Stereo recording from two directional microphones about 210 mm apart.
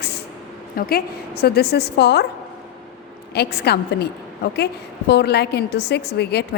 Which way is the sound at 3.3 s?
50° left (ahead or behind).